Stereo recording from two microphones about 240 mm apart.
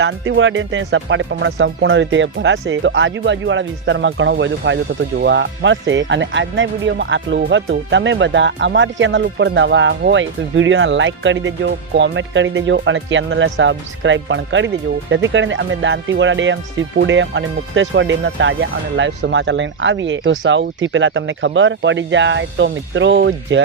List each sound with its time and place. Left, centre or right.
0.0 s speech: right